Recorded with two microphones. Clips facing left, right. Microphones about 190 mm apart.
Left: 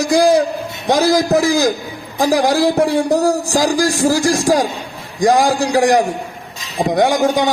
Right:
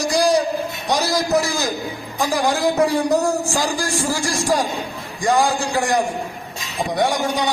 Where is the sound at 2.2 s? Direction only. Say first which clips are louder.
Left 6 dB; 40° left (ahead or behind).